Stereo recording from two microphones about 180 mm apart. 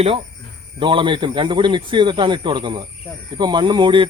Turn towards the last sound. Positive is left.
turn(degrees=-25)  # may be behind; listen again after turning